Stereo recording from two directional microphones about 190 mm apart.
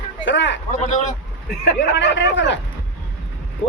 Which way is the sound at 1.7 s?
70° left (ahead or behind).